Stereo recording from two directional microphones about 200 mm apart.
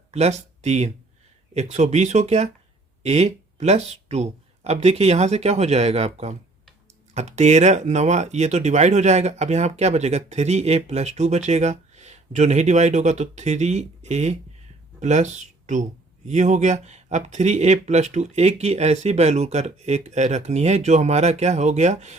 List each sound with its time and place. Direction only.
0.1 s speech: 35° right (ahead or behind)